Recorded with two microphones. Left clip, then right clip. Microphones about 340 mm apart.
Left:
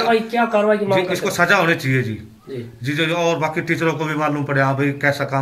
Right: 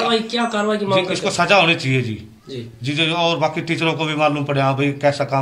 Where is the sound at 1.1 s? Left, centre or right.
Centre.